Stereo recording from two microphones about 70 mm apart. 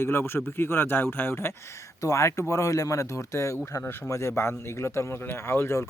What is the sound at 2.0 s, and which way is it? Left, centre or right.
Speech, left.